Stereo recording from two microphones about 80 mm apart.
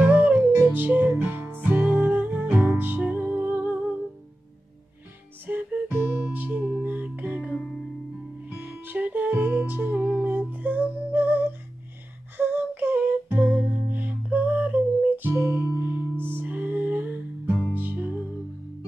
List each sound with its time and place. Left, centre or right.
0.0 s music: centre
5.5 s music: centre
8.5 s music: right